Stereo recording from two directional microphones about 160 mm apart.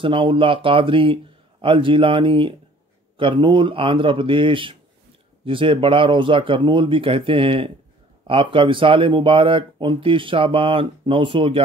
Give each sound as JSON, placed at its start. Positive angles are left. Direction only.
{"t": 0.0, "sound": "speech", "side_deg": -30}